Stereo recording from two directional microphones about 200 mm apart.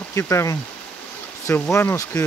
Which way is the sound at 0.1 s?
15° left (ahead or behind).